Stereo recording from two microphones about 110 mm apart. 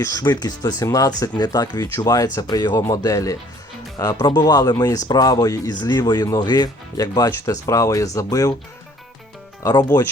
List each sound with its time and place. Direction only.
0.0 s speech: 35° left (ahead or behind)
9.6 s speech: 30° left (ahead or behind)